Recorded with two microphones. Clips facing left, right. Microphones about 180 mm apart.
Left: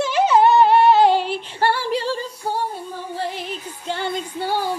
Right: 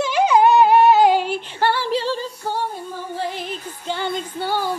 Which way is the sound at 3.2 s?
Centre (ahead or behind).